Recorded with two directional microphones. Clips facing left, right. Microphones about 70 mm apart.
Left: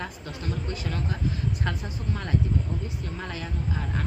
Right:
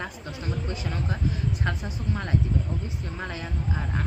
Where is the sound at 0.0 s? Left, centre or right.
Right.